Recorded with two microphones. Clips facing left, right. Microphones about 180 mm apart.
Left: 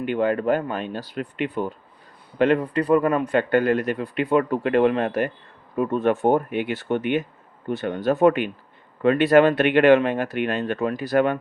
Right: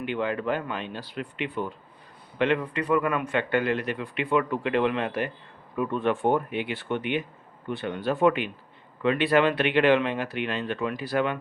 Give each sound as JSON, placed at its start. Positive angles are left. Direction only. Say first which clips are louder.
{"t": 0.0, "sound": "a man's voice", "louder": "left 6 dB", "side_deg": 45}